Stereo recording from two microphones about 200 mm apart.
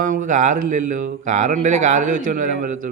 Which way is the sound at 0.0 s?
40° right (ahead or behind).